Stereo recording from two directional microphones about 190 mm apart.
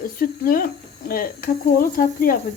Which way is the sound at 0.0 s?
50° left (ahead or behind).